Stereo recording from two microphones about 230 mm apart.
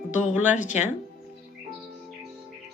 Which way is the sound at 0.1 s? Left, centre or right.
Left.